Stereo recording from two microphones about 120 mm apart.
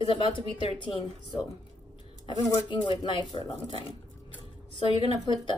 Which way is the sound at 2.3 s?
40° left (ahead or behind).